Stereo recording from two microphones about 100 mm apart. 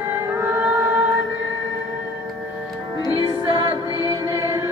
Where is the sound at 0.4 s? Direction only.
20° right (ahead or behind).